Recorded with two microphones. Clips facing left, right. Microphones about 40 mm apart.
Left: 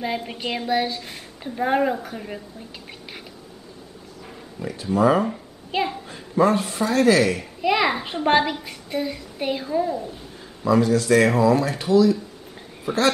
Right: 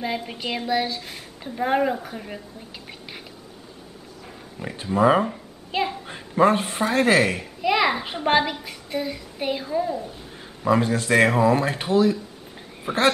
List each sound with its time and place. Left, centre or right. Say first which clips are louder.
0.0 s a child's voice: left 1 dB; centre
4.6 s speech: even; right
5.2 s a child's voice: left 1 dB; centre
6.0 s a man's voice: right 2 dB; right
7.4 s a child's voice: even; centre
10.6 s speech: left 2 dB; right